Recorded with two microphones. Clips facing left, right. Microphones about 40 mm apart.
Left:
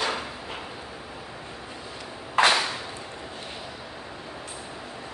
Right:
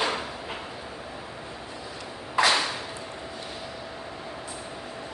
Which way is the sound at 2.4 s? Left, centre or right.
Left.